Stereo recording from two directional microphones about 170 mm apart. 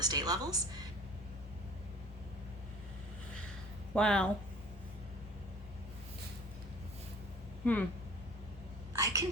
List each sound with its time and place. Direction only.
0.0 s a woman's voice: 20° right (ahead or behind)
3.9 s speech: 5° left (ahead or behind)
7.6 s speech: 10° left (ahead or behind)
8.9 s a sound: 20° right (ahead or behind)